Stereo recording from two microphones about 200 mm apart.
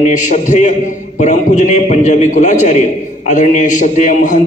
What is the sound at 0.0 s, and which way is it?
A man's voice, 35° left (ahead or behind).